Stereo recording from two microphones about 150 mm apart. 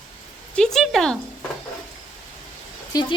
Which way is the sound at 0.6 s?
5° left (ahead or behind).